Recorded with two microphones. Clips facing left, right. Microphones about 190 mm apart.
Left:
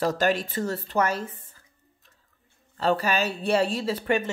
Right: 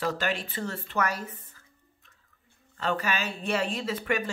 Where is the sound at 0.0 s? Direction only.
40° left (ahead or behind).